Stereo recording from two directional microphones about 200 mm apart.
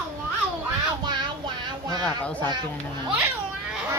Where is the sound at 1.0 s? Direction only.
20° right (ahead or behind).